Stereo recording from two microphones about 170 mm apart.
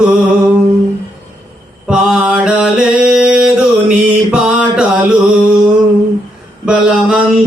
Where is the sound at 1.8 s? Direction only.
5° right (ahead or behind).